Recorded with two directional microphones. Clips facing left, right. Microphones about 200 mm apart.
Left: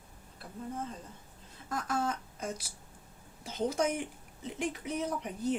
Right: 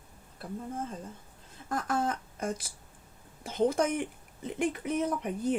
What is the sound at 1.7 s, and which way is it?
Speech, 55° right (ahead or behind).